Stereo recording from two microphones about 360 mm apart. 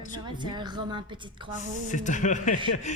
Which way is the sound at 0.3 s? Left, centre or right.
Centre.